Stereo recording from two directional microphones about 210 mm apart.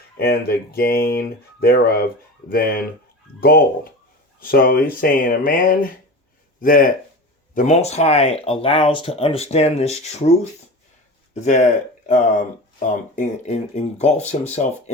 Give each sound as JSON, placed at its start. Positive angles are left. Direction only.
{"t": 0.2, "sound": "speech", "side_deg": 45}
{"t": 11.3, "sound": "speech", "side_deg": 35}